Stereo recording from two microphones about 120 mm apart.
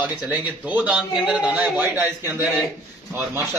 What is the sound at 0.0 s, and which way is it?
A man's voice, 10° right (ahead or behind).